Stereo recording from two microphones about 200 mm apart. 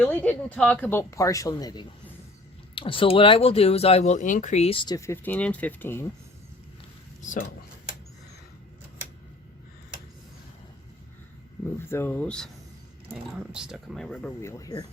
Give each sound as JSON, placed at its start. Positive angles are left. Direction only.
{"t": 0.0, "sound": "speech", "side_deg": 10}
{"t": 7.2, "sound": "speech", "side_deg": 40}
{"t": 11.8, "sound": "speech", "side_deg": 10}
{"t": 13.5, "sound": "speech", "side_deg": -5}